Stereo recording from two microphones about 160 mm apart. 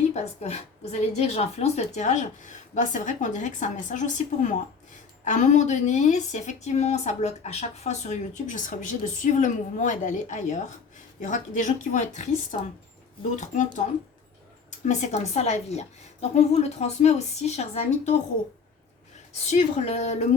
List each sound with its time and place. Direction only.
0.1 s a woman's voice: 45° left (ahead or behind)
14.8 s a woman's voice: 45° left (ahead or behind)
19.3 s a woman's voice: 45° left (ahead or behind)